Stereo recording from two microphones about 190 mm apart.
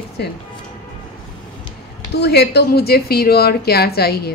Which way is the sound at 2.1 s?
60° left (ahead or behind).